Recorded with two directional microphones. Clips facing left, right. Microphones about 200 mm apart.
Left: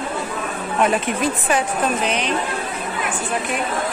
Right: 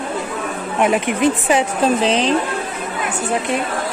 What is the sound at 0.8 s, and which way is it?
A woman's voice, 15° right (ahead or behind).